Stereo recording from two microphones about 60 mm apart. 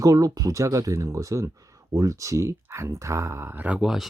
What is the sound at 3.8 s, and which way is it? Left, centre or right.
Speech, centre.